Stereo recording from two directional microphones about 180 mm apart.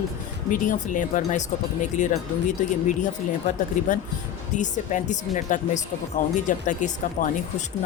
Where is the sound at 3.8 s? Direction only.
45° left (ahead or behind).